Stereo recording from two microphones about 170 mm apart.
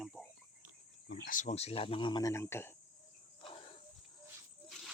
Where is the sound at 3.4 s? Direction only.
35° left (ahead or behind).